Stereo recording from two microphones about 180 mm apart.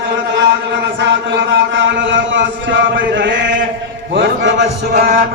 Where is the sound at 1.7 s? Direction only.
90° right.